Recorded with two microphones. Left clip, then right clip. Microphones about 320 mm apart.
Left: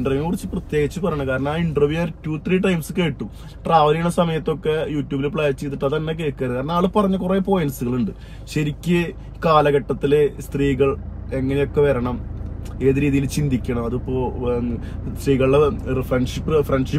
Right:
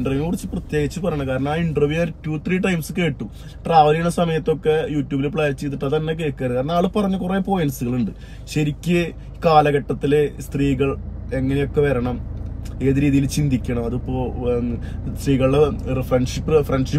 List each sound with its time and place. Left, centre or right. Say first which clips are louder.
0.2 s speech: even; centre
12.8 s speech: even; centre
13.3 s speech: even; centre